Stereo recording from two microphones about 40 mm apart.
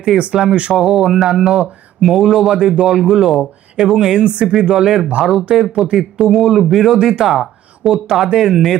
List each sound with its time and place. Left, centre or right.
0.1 s speech: centre
0.5 s speech: right
0.8 s speech: centre
3.8 s speech: centre
4.7 s speech: centre
6.9 s speech: centre
7.9 s speech: centre